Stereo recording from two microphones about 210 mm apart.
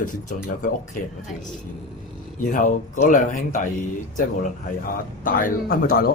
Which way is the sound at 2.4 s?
35° left (ahead or behind).